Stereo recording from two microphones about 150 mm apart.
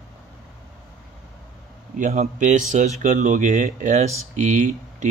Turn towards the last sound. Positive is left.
turn(degrees=-55)  # may be behind; listen again after turning